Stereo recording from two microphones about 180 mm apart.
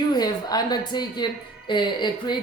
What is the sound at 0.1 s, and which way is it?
A woman's voice, 20° left (ahead or behind).